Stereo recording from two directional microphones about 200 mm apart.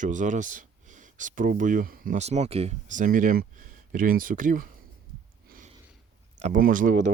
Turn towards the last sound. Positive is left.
turn(degrees=-40)  # may be behind; listen again after turning